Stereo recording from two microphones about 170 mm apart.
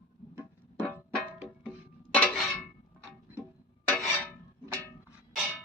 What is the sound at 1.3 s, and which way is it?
Music, 5° right (ahead or behind).